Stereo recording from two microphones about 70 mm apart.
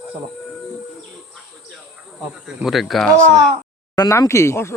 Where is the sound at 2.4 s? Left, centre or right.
Centre.